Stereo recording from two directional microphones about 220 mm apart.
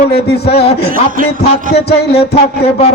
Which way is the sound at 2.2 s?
25° left (ahead or behind).